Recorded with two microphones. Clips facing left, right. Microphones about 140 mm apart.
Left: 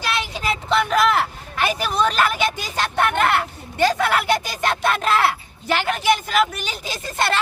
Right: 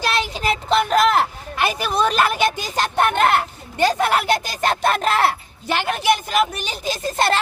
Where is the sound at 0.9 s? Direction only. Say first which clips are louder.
Right 2 dB; 40° right (ahead or behind).